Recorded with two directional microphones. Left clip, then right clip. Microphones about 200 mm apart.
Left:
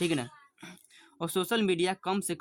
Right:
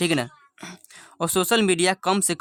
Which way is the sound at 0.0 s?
35° right (ahead or behind).